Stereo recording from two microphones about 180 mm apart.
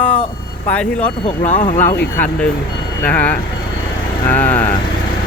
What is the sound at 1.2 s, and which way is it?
Speech, 30° left (ahead or behind).